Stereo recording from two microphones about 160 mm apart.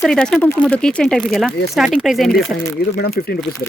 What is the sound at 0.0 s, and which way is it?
Speech, 5° left (ahead or behind).